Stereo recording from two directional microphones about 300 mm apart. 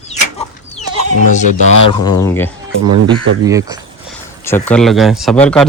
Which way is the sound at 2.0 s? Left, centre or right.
Centre.